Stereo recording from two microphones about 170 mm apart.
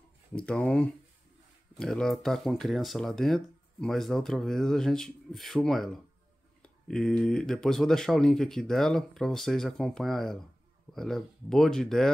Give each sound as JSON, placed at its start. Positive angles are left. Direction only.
{"t": 0.4, "sound": "speech", "side_deg": 5}